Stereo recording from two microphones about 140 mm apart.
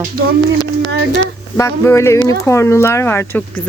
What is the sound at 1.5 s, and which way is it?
Speech, 20° left (ahead or behind).